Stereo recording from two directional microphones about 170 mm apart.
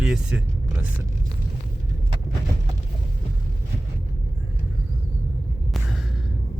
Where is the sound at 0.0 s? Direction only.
5° right (ahead or behind).